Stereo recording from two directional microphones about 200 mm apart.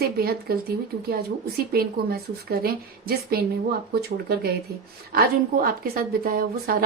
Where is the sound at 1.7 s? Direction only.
50° right (ahead or behind).